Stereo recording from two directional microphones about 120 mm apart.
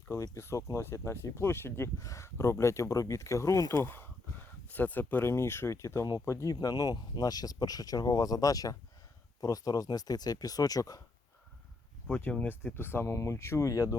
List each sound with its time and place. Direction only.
0.3 s speech: 25° left (ahead or behind)
12.0 s speech: 15° left (ahead or behind)